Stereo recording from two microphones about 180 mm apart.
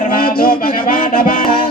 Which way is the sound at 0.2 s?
55° left (ahead or behind).